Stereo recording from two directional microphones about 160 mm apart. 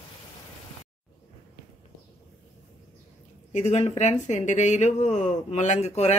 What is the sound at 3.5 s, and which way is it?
Speech, 45° left (ahead or behind).